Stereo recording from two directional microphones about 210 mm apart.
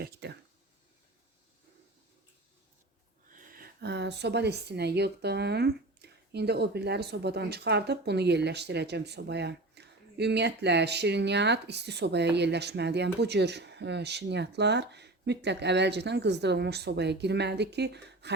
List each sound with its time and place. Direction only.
0.0 s speech: 55° right (ahead or behind)
3.2 s speech: 40° right (ahead or behind)